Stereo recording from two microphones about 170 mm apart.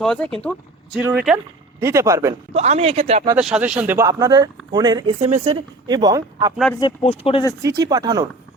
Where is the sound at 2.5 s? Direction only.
40° right (ahead or behind).